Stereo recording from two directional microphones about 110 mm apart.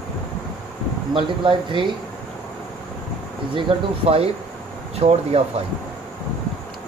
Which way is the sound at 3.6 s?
65° right (ahead or behind).